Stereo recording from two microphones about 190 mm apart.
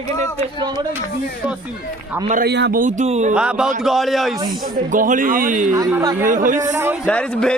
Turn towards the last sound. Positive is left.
turn(degrees=5)  # may be behind; listen again after turning